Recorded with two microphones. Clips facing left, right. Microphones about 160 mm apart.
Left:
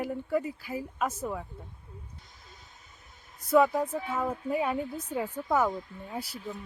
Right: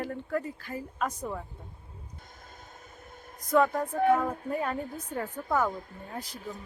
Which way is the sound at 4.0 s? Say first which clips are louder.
Right 9 dB; 55° right (ahead or behind).